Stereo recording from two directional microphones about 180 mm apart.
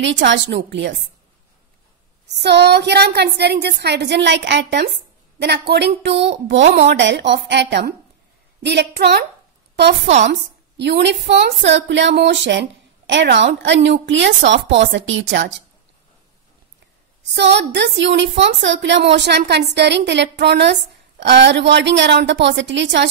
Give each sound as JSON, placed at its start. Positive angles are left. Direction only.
{"t": 0.0, "sound": "a woman's voice", "side_deg": -90}
{"t": 2.3, "sound": "a woman's voice", "side_deg": -70}
{"t": 17.3, "sound": "a woman's voice", "side_deg": -75}